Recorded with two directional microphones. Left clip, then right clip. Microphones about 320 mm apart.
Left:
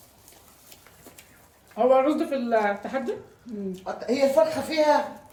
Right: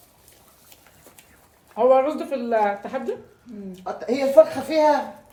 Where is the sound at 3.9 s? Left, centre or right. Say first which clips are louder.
Right 4 dB; right.